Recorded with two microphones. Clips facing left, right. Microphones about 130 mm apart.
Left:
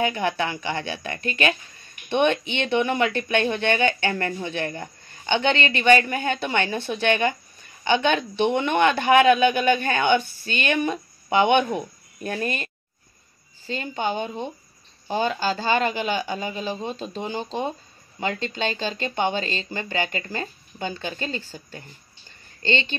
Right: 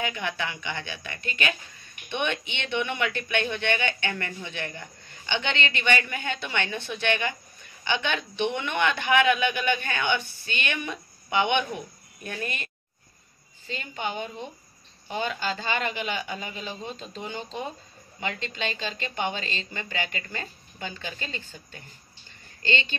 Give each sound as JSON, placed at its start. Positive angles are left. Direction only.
{"t": 0.0, "sound": "speech", "side_deg": 35}
{"t": 13.7, "sound": "speech", "side_deg": 35}